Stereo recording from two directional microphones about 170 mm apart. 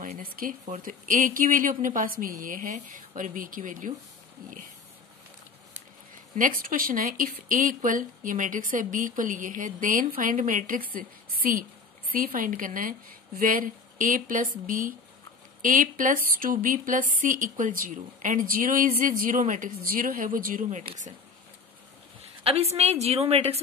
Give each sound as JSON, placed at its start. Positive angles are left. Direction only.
{"t": 0.0, "sound": "speech", "side_deg": -55}
{"t": 6.3, "sound": "a woman's voice", "side_deg": -55}
{"t": 22.2, "sound": "a woman's voice", "side_deg": -35}